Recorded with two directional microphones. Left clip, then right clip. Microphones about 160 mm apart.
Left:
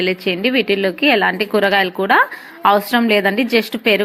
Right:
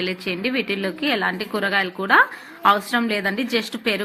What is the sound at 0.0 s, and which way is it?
A woman's voice, 30° left (ahead or behind).